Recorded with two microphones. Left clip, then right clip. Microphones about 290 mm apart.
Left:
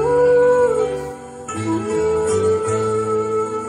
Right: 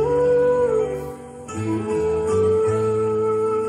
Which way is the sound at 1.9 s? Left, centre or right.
Left.